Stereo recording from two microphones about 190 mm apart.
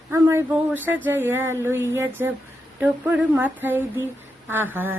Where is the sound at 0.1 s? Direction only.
15° right (ahead or behind).